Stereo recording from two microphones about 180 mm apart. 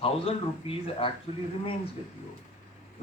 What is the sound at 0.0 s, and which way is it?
Speech, 30° left (ahead or behind).